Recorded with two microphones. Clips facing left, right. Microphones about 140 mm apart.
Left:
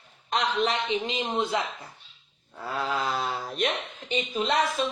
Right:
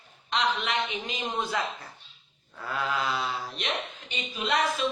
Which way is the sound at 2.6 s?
35° left (ahead or behind).